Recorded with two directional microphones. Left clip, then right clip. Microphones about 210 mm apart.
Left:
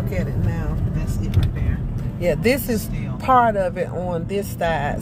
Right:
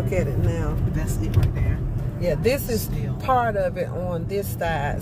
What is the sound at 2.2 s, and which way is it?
Speech, 25° left (ahead or behind).